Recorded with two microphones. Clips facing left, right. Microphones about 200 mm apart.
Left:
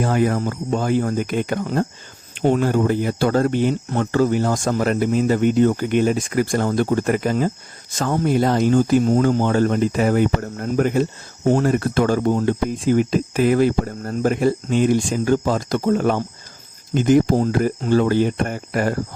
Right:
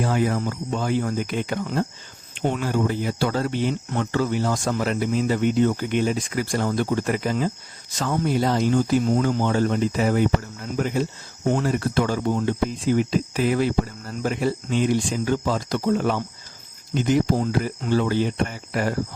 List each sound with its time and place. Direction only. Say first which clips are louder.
0.0 s speech: left 3 dB; 50° left (ahead or behind)